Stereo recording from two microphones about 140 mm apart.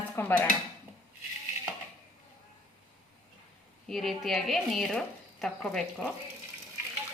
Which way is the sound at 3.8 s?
Centre (ahead or behind).